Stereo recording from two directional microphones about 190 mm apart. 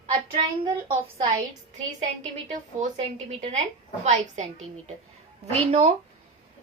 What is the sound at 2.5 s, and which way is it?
Speech, 35° right (ahead or behind).